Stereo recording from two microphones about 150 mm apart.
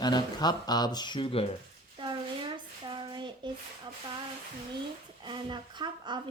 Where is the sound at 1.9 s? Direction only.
30° right (ahead or behind).